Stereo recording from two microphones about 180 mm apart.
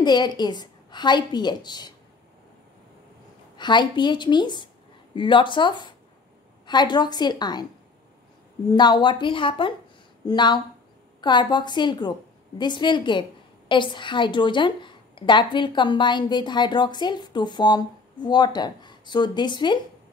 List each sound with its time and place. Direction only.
0.0 s a woman's voice: 25° left (ahead or behind)
3.5 s a woman's voice: 25° left (ahead or behind)
8.7 s a woman's voice: 25° left (ahead or behind)